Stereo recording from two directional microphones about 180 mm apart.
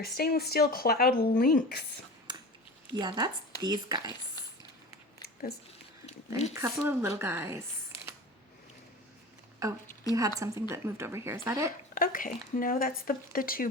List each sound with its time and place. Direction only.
0.0 s speech: 60° left (ahead or behind)
2.3 s a sound: 25° right (ahead or behind)
2.9 s speech: 25° right (ahead or behind)
5.2 s a sound: 60° left (ahead or behind)
6.5 s a woman's voice: 15° right (ahead or behind)
9.6 s a woman's voice: 20° right (ahead or behind)
11.9 s speech: 50° left (ahead or behind)